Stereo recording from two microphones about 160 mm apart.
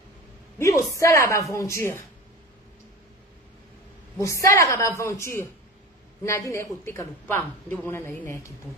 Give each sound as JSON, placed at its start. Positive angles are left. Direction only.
{"t": 0.6, "sound": "a woman's voice", "side_deg": 20}
{"t": 4.2, "sound": "a woman's voice", "side_deg": 20}